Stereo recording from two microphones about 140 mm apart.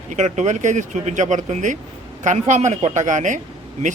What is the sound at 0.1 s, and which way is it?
Speech, 60° right (ahead or behind).